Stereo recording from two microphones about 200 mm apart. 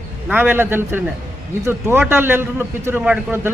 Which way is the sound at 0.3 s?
10° right (ahead or behind).